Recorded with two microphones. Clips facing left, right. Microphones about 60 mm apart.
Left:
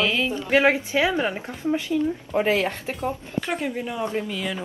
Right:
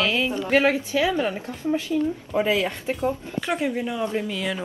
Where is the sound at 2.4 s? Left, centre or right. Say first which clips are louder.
Even; left.